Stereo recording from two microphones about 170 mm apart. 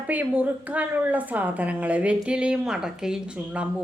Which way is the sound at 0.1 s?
10° right (ahead or behind).